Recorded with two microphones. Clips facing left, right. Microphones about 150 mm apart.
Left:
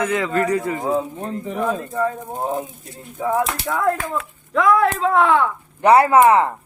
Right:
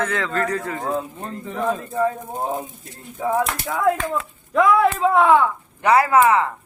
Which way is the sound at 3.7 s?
Centre (ahead or behind).